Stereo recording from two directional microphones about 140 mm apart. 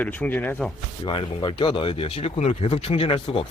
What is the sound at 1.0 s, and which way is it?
Speech, 35° left (ahead or behind).